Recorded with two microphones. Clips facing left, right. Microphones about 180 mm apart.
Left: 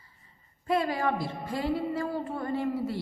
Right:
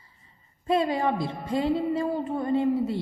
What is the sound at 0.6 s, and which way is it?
A woman's voice, 25° right (ahead or behind).